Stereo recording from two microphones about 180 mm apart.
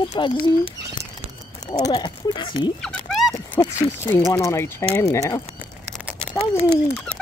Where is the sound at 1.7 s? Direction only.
25° left (ahead or behind).